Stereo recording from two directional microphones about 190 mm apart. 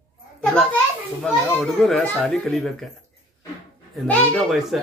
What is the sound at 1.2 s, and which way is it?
Speech, 5° left (ahead or behind).